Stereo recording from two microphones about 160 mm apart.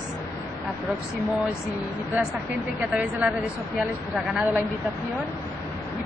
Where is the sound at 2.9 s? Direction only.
5° right (ahead or behind).